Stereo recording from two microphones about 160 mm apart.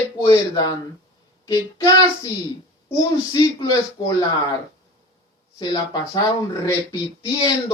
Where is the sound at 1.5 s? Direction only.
20° left (ahead or behind).